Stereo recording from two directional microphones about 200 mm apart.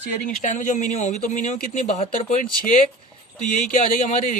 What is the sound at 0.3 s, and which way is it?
Speech, 40° left (ahead or behind).